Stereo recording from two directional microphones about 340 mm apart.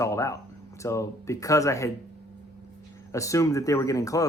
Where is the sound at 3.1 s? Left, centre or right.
Centre.